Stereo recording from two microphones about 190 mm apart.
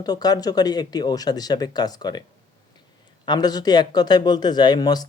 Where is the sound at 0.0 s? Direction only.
20° left (ahead or behind).